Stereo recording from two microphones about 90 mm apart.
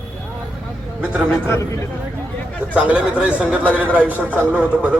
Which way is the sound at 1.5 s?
35° left (ahead or behind).